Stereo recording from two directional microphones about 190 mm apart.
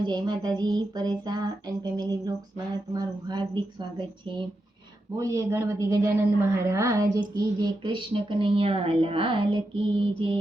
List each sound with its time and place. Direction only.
0.0 s speech: 20° right (ahead or behind)
5.1 s a man's voice: 15° right (ahead or behind)